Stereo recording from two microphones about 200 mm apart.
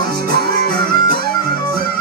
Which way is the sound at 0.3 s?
50° right (ahead or behind).